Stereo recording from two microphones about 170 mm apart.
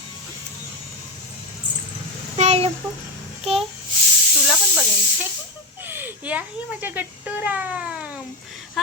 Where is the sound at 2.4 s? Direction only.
35° right (ahead or behind).